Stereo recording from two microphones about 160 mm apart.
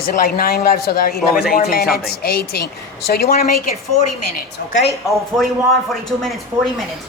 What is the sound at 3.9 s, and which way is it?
Speech, 55° left (ahead or behind).